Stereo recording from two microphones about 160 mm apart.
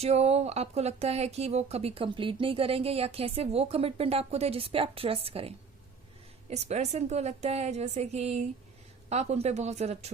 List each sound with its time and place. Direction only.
0.0 s a woman's voice: 40° right (ahead or behind)